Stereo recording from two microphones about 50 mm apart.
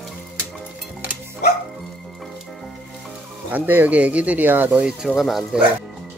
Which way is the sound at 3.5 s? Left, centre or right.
Right.